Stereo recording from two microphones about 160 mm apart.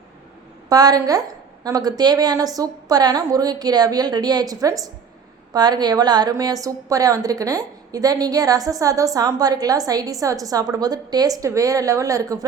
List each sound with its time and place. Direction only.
0.7 s a woman's voice: 25° right (ahead or behind)